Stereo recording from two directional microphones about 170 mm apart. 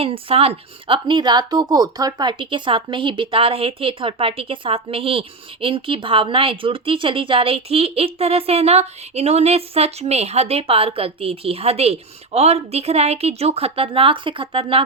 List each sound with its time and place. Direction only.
0.0 s speech: 35° right (ahead or behind)